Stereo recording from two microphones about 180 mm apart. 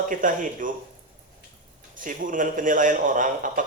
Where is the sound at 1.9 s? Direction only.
45° right (ahead or behind).